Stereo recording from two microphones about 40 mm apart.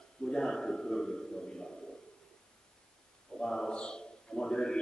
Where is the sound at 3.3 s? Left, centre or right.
Centre.